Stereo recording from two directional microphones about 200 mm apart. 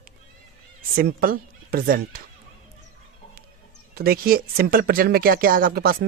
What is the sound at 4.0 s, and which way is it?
Speech, 50° right (ahead or behind).